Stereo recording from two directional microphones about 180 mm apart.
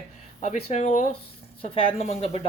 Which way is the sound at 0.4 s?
40° left (ahead or behind).